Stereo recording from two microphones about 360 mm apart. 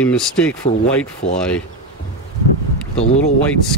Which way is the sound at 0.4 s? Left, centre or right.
Centre.